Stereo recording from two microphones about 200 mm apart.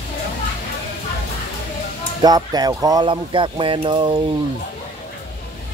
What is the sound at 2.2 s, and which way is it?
Speech, 20° right (ahead or behind).